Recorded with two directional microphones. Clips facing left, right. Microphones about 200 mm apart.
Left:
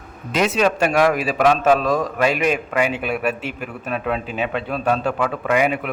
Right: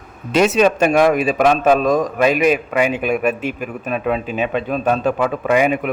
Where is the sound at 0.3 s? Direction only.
25° right (ahead or behind).